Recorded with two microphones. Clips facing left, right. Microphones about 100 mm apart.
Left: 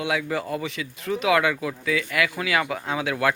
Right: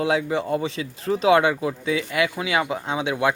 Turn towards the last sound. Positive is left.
turn(degrees=-20)  # may be behind; listen again after turning